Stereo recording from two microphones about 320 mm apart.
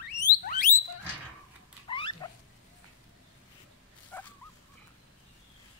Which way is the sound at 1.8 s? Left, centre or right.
Centre.